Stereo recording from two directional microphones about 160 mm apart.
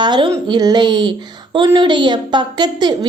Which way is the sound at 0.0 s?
30° right (ahead or behind).